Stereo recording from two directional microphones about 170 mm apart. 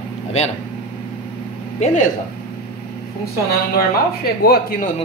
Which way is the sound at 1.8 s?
50° left (ahead or behind).